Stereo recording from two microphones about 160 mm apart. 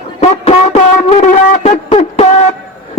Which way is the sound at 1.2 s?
45° left (ahead or behind).